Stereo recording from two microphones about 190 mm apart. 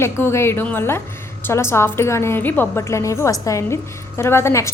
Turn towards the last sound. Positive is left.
turn(degrees=15)  # may be behind; listen again after turning